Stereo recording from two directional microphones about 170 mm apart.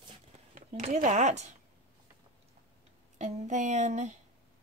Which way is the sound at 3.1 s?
45° right (ahead or behind).